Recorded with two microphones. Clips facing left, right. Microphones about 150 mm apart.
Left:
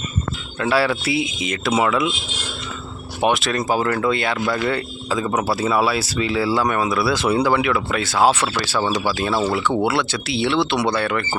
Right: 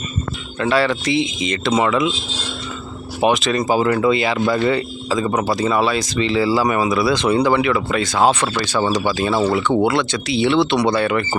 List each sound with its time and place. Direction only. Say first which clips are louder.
0.6 s speech: right 2 dB; 5° left (ahead or behind)
3.2 s speech: right 3 dB; centre (ahead or behind)